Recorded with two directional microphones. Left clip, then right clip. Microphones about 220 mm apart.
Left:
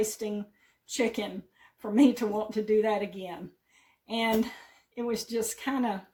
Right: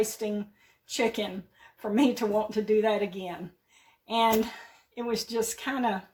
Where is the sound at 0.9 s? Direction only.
15° left (ahead or behind).